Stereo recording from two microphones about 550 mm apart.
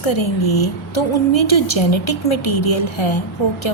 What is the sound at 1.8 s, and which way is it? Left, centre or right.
Speech, left.